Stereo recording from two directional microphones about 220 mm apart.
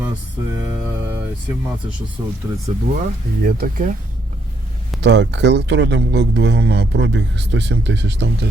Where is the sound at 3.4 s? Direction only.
40° right (ahead or behind).